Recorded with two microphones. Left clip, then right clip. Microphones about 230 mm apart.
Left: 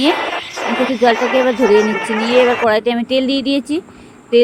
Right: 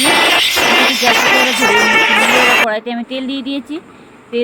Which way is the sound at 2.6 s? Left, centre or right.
Left.